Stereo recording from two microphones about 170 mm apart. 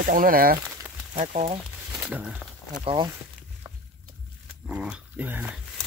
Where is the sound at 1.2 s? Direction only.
40° right (ahead or behind).